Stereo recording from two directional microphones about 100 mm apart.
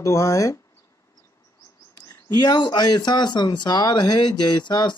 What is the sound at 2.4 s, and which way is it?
Speech, 45° left (ahead or behind).